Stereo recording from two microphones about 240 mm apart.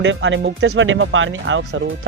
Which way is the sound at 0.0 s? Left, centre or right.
Right.